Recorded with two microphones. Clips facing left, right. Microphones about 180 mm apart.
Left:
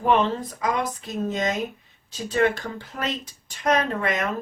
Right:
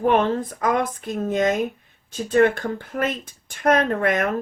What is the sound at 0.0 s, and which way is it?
Speech, 55° right (ahead or behind).